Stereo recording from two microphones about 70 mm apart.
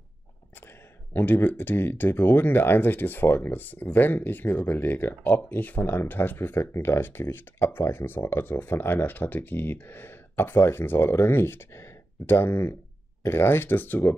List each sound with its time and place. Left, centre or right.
1.1 s speech: left